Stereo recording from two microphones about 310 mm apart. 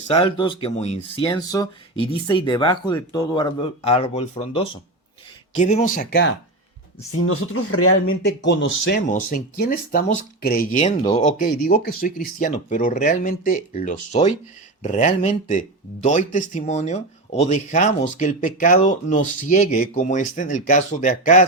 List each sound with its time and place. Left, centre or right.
0.1 s speech: centre; by 6.3 s left
7.3 s speech: left